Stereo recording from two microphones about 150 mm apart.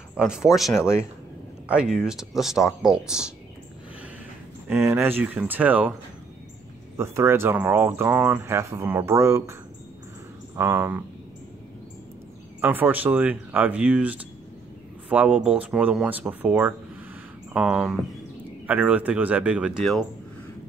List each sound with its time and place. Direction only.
0.1 s speech: 5° right (ahead or behind)
4.6 s speech: 15° right (ahead or behind)
7.0 s speech: 20° right (ahead or behind)
12.5 s speech: 15° right (ahead or behind)